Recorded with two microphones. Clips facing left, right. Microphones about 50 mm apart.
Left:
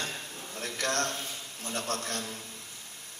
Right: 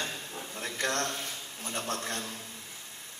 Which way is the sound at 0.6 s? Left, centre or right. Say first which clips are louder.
Left 1 dB; right.